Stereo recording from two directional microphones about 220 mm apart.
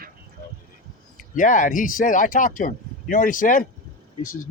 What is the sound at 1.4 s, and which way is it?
Speech, 35° left (ahead or behind).